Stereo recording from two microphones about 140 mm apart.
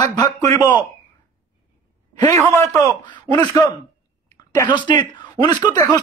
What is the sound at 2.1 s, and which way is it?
A man's voice, 25° left (ahead or behind).